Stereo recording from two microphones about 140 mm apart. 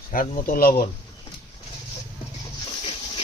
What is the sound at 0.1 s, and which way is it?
Speech, 80° left.